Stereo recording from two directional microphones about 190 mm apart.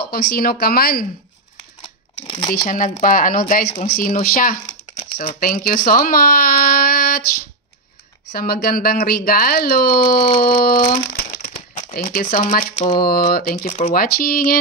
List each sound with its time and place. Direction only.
0.0 s speech: 55° left (ahead or behind)
1.8 s a sound: 30° left (ahead or behind)
2.5 s speech: 45° left (ahead or behind)
4.9 s speech: 30° left (ahead or behind)
5.4 s speech: 50° left (ahead or behind)
8.3 s speech: 50° left (ahead or behind)
10.1 s speech: 25° left (ahead or behind)
10.6 s speech: 50° left (ahead or behind); by 13.0 s 30° left (ahead or behind)
13.0 s speech: 50° left (ahead or behind)